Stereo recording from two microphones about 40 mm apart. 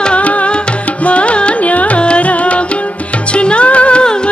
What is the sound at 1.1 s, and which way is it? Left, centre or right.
Carnatic music, left.